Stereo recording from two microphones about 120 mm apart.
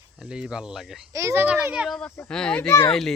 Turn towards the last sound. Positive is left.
turn(degrees=5)  # may be behind; listen again after turning